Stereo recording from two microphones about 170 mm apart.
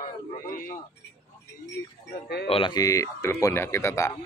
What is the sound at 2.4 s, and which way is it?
Speech, 30° left (ahead or behind).